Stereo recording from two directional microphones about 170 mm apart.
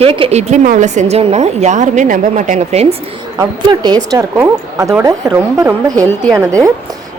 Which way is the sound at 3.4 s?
25° right (ahead or behind).